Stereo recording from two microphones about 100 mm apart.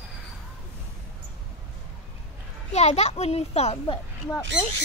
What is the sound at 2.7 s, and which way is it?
A child's voice, 90° left.